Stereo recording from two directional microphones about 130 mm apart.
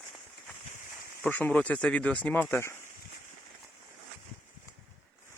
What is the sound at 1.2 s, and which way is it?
Speech, 10° left (ahead or behind).